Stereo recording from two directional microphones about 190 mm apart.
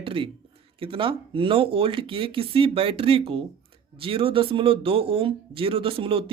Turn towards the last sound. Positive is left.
turn(degrees=-30)  # may be behind; listen again after turning